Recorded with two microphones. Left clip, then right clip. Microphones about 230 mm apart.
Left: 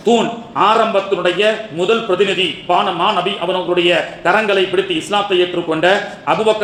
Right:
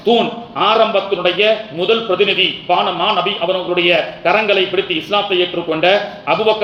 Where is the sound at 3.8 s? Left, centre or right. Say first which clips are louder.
Right 2 dB; left.